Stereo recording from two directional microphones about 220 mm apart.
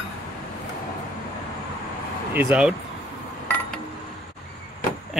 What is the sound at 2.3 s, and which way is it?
Speech, 10° right (ahead or behind).